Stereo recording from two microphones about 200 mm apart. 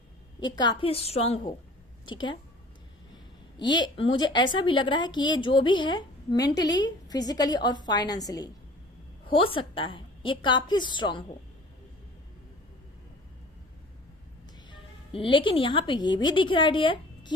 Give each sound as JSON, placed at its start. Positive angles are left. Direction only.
{"t": 0.3, "sound": "a woman's voice", "side_deg": 20}
{"t": 3.6, "sound": "a woman's voice", "side_deg": 20}
{"t": 14.7, "sound": "a woman's voice", "side_deg": 25}